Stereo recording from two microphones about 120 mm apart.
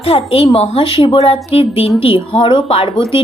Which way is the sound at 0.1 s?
55° left (ahead or behind).